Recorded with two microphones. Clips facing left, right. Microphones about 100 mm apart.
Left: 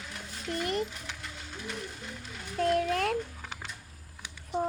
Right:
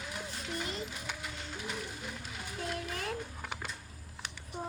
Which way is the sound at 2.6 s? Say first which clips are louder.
Left 12 dB; 70° left (ahead or behind).